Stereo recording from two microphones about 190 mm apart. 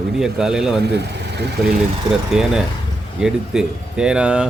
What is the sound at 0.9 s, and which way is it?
Speech, 60° right (ahead or behind).